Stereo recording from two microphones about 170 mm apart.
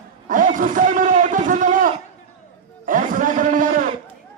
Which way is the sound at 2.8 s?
55° right (ahead or behind).